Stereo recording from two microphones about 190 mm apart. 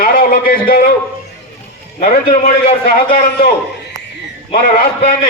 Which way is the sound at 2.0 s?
40° left (ahead or behind).